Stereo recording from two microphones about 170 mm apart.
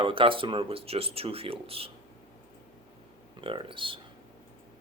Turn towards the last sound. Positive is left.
turn(degrees=-30)  # may be behind; listen again after turning